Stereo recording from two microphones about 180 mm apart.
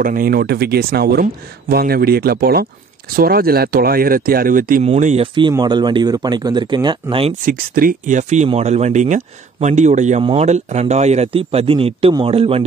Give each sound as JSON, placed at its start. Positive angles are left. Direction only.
{"t": 0.0, "sound": "speech", "side_deg": -50}
{"t": 4.8, "sound": "speech", "side_deg": -35}
{"t": 7.4, "sound": "speech", "side_deg": -55}